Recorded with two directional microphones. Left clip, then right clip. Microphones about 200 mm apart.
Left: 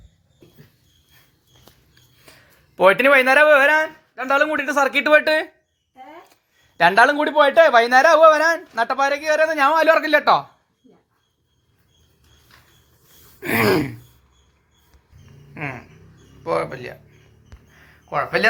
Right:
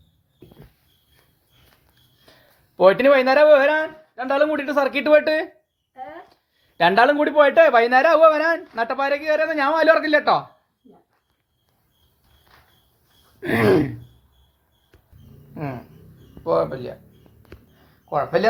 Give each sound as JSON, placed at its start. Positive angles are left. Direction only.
{"t": 2.2, "sound": "speech", "side_deg": -5}
{"t": 13.4, "sound": "speech", "side_deg": 5}
{"t": 15.5, "sound": "a sound", "side_deg": 10}
{"t": 16.4, "sound": "speech", "side_deg": 20}